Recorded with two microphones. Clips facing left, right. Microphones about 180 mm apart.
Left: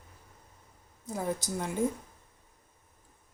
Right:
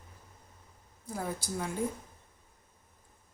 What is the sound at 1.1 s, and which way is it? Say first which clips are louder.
Speech: left 3 dB; 20° left (ahead or behind).